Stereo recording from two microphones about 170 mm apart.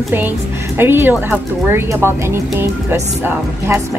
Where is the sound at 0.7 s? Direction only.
15° right (ahead or behind).